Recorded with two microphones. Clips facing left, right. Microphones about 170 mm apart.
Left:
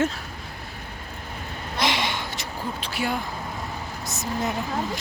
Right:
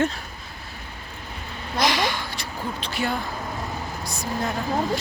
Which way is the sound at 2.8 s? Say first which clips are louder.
Right 1 dB; 10° left (ahead or behind).